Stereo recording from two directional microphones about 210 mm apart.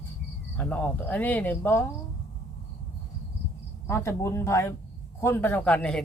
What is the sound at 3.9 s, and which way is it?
Speech, 10° left (ahead or behind).